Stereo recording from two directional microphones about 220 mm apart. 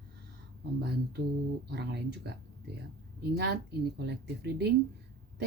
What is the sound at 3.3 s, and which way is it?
Speech, 50° right (ahead or behind).